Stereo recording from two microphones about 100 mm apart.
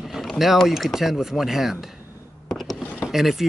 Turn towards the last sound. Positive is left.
turn(degrees=-5)  # may be behind; listen again after turning